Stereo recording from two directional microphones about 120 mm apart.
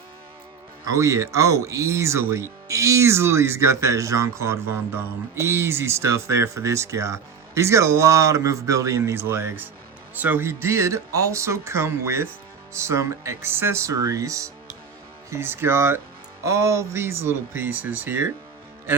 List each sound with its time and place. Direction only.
0.9 s speech: 25° right (ahead or behind)